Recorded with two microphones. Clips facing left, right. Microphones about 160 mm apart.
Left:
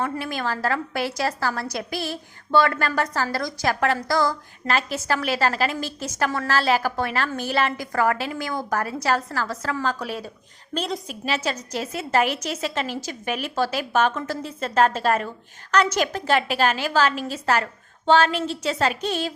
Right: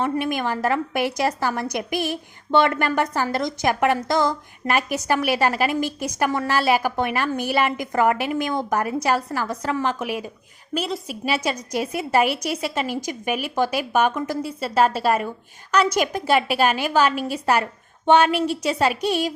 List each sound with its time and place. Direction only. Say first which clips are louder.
0.0 s a woman's voice: right 4 dB; 20° right (ahead or behind)